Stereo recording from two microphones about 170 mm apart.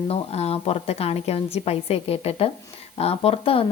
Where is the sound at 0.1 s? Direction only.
35° left (ahead or behind).